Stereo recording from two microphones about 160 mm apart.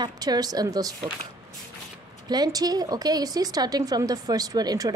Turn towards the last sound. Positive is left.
turn(degrees=-25)  # may be behind; listen again after turning